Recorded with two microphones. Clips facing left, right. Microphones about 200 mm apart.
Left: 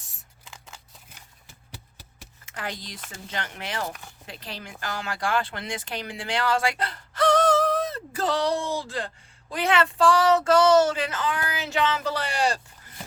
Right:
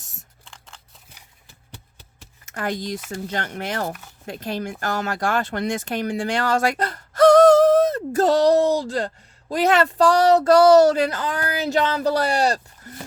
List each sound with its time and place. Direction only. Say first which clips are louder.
0.4 s scissors: left 3 dB; 5° left (ahead or behind)
2.5 s speech: right 9 dB; 50° right (ahead or behind)